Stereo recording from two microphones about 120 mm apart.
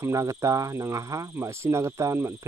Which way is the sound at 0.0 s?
25° right (ahead or behind).